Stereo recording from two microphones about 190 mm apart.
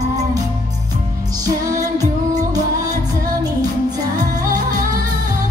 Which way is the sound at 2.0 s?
20° right (ahead or behind).